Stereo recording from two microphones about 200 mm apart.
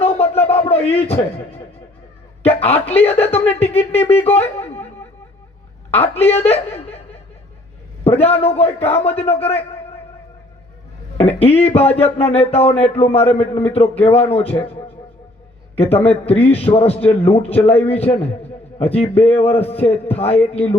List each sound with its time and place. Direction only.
0.4 s a sound: 30° left (ahead or behind)
1.0 s speech: 30° left (ahead or behind)
4.4 s a sound: 30° left (ahead or behind)
5.9 s speech: 30° left (ahead or behind)
8.0 s speech: 30° left (ahead or behind)
11.2 s speech: 30° left (ahead or behind)